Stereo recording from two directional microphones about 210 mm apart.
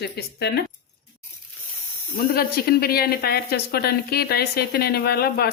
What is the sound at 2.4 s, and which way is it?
Speech, 45° left (ahead or behind).